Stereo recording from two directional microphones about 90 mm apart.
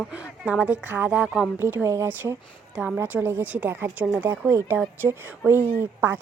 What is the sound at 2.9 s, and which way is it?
A woman's voice, 25° right (ahead or behind).